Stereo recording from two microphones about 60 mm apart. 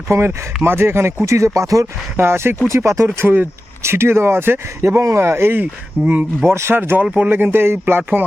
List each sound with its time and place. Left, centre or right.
0.3 s speech: right
2.1 s speech: right
2.6 s speech: right
6.0 s speech: right
6.5 s speech: right